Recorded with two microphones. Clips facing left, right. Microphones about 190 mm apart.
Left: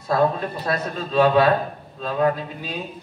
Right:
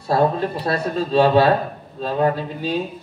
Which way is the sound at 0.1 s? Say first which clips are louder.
Right 2 dB; 30° right (ahead or behind).